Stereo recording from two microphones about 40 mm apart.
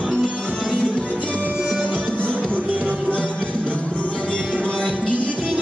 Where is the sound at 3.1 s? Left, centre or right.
Left.